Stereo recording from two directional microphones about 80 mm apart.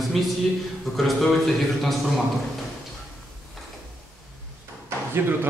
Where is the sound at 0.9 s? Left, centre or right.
Centre.